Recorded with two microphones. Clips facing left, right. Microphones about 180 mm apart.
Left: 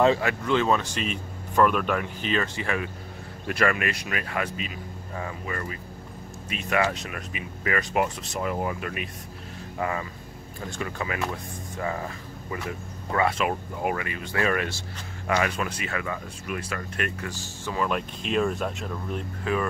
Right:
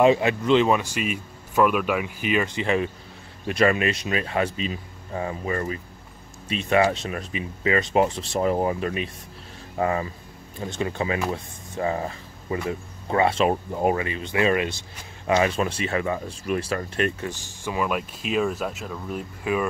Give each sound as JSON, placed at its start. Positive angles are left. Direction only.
{"t": 0.0, "sound": "speech", "side_deg": -20}